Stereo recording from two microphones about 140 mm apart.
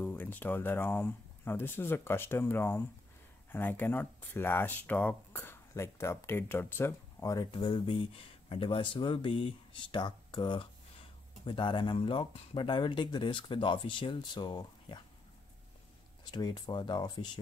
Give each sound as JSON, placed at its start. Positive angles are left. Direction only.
{"t": 0.0, "sound": "speech", "side_deg": 10}
{"t": 16.3, "sound": "speech", "side_deg": 30}